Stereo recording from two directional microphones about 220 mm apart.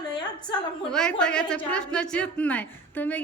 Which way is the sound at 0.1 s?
20° left (ahead or behind).